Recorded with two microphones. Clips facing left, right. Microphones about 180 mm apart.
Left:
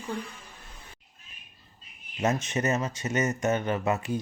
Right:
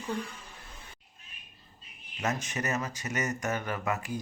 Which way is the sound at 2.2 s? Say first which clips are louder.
Left 6 dB; 25° left (ahead or behind).